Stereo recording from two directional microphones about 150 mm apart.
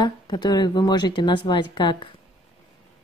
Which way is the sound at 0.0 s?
30° left (ahead or behind).